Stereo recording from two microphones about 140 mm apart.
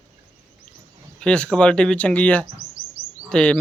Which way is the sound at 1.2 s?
5° left (ahead or behind).